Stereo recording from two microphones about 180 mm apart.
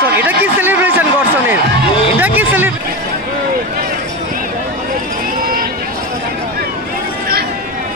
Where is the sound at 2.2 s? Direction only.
10° right (ahead or behind).